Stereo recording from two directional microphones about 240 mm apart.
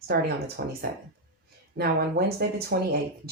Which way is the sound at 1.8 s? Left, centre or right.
Right.